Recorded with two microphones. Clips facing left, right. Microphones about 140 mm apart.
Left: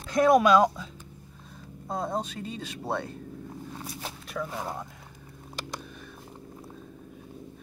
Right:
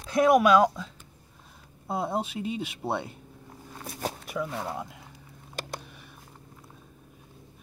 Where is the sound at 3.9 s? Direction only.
55° right (ahead or behind).